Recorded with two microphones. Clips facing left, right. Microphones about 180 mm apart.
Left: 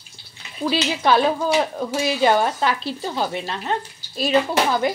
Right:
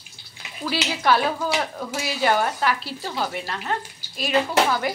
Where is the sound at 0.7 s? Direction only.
20° left (ahead or behind).